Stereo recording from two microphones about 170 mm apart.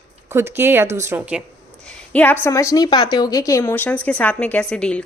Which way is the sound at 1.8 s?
10° left (ahead or behind).